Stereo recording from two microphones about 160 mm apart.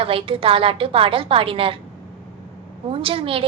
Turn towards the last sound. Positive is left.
turn(degrees=-35)  # may be behind; listen again after turning